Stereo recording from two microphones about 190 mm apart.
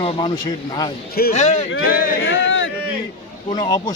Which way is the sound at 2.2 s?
75° left (ahead or behind).